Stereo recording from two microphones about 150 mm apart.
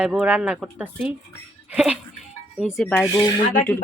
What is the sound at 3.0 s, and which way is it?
Speech, 25° left (ahead or behind).